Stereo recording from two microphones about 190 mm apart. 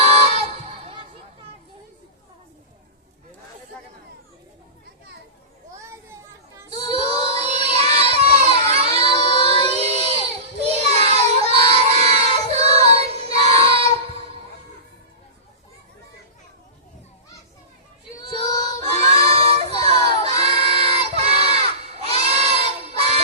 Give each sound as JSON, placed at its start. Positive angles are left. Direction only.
{"t": 0.3, "sound": "a sound", "side_deg": -30}
{"t": 5.8, "sound": "children playing", "side_deg": -15}
{"t": 6.7, "sound": "child singing", "side_deg": -30}
{"t": 18.6, "sound": "child singing", "side_deg": -35}